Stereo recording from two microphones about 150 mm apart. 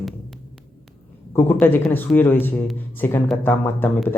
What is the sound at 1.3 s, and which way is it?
Speech, 15° left (ahead or behind).